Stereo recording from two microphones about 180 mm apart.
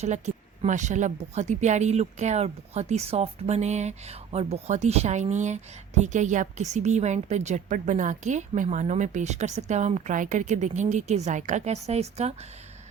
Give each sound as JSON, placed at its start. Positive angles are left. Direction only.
{"t": 0.0, "sound": "a woman's voice", "side_deg": -40}